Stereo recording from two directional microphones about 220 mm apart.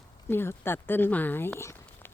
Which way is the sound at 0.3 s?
10° left (ahead or behind).